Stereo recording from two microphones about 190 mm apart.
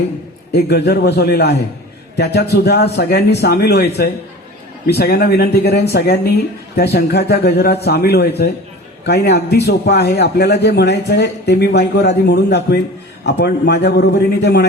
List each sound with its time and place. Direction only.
0.5 s a man's voice: 60° left (ahead or behind)